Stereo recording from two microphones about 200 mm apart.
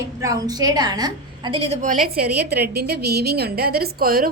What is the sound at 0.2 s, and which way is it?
A woman's voice, 15° right (ahead or behind).